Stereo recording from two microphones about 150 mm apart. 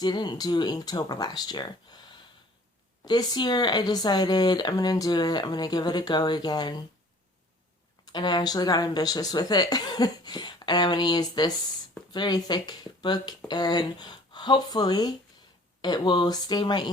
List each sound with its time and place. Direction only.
0.0 s speech: 30° left (ahead or behind)
8.0 s speech: 30° left (ahead or behind)